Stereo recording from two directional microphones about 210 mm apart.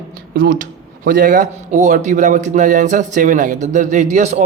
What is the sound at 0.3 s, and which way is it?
Speech, 40° right (ahead or behind).